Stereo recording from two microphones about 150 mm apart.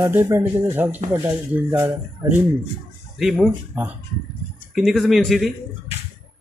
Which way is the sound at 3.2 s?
Centre (ahead or behind).